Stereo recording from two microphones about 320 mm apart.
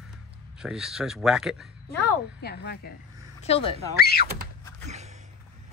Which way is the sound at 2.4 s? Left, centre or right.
Left.